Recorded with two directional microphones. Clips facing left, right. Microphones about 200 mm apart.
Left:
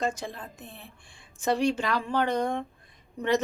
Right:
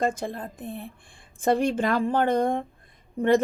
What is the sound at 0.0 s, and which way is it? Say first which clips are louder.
A woman's voice: right 4 dB; 55° right (ahead or behind).